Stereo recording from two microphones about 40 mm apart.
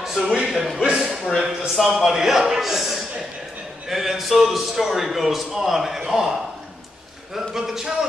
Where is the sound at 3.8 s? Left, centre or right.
Centre.